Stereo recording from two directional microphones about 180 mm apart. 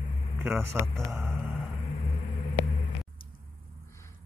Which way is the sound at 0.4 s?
10° right (ahead or behind).